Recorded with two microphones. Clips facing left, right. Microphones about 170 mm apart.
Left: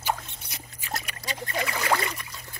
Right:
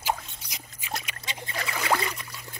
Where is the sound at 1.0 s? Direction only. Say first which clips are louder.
Left 4 dB; 20° right (ahead or behind).